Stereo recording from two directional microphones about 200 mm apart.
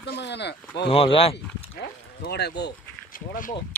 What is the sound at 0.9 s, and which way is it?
Speech, 25° left (ahead or behind).